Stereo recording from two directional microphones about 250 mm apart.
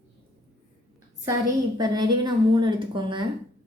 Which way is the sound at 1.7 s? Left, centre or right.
Centre.